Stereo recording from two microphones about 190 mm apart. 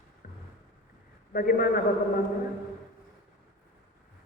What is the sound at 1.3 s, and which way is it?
Speech, 50° left (ahead or behind).